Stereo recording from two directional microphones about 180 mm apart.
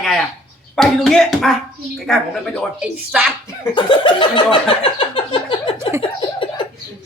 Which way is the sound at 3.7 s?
25° left (ahead or behind).